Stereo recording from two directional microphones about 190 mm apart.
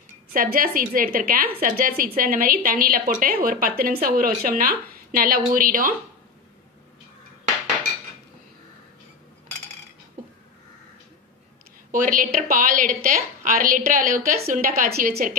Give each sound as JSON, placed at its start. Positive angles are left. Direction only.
{"t": 0.3, "sound": "a woman's voice", "side_deg": -50}
{"t": 11.9, "sound": "a woman's voice", "side_deg": -45}